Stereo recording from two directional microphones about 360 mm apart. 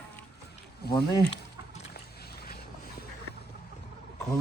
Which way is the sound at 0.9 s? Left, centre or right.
Centre.